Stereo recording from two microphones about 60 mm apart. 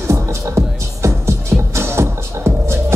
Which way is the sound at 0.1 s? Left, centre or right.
Right.